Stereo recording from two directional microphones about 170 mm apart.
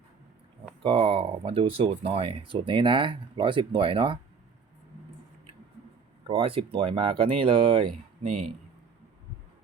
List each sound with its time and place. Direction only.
0.8 s speech: 30° right (ahead or behind)
6.2 s speech: 30° right (ahead or behind)